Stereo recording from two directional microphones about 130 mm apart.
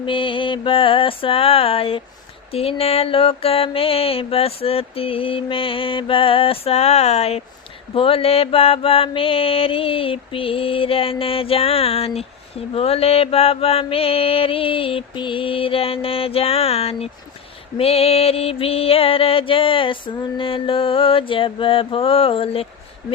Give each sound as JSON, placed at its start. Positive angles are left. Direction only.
{"t": 0.0, "sound": "mantra", "side_deg": 40}